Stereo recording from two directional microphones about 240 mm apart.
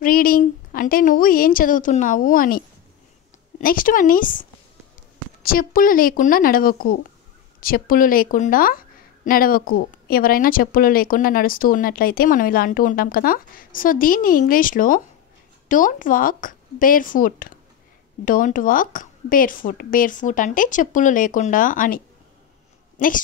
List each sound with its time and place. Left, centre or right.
0.0 s a woman's voice: left